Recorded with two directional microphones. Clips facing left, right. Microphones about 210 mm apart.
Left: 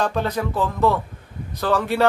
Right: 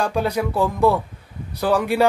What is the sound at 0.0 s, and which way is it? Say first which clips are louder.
Speech: right 1 dB; 10° right (ahead or behind).